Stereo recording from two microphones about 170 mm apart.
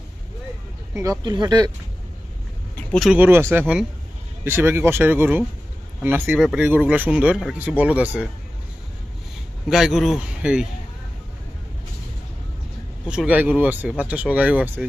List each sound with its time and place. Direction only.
0.9 s speech: 20° right (ahead or behind)
2.9 s speech: centre (ahead or behind)
3.2 s speech: 15° right (ahead or behind)
9.6 s speech: centre (ahead or behind)
13.1 s speech: 5° right (ahead or behind)